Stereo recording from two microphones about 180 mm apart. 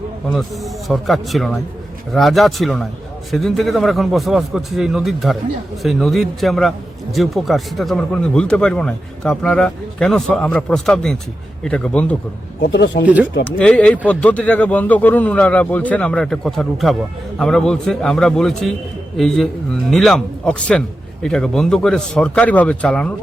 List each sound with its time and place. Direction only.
0.3 s a man's voice: centre (ahead or behind)
12.9 s speech: 45° left (ahead or behind)
13.4 s a man's voice: 5° left (ahead or behind)